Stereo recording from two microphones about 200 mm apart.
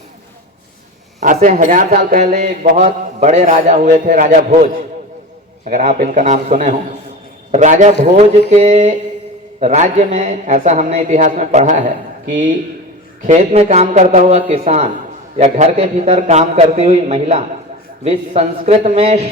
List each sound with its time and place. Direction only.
1.2 s speech: 40° right (ahead or behind)